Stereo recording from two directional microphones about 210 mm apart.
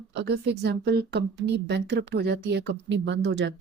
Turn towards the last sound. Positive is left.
turn(degrees=-55)  # may be behind; listen again after turning